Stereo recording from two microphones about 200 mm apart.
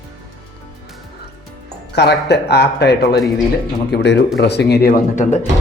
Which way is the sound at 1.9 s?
55° left (ahead or behind).